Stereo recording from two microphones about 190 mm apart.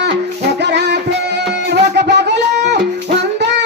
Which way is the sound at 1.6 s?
60° right (ahead or behind).